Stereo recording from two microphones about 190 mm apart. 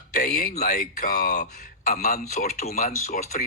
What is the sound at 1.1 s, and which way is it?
Speech, 55° left (ahead or behind).